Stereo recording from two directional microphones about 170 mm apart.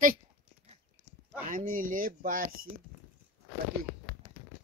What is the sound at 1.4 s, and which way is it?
Speech, 55° right (ahead or behind).